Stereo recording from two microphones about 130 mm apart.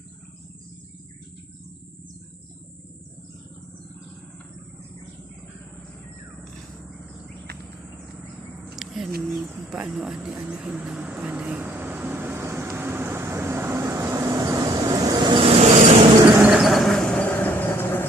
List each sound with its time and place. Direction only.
8.7 s a sound: centre (ahead or behind)
9.6 s vehicle: 5° right (ahead or behind); by 15.5 s 40° right (ahead or behind)
15.5 s vehicle: 55° right (ahead or behind)
16.4 s vehicle: 5° right (ahead or behind); by 18.1 s 15° left (ahead or behind)